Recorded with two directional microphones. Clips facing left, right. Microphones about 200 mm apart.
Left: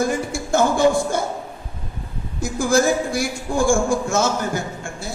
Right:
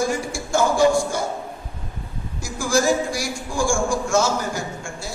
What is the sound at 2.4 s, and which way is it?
A man's voice, 55° left (ahead or behind).